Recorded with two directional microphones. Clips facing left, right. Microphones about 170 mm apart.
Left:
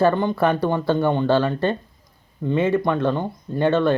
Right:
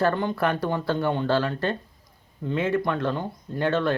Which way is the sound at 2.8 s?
20° left (ahead or behind).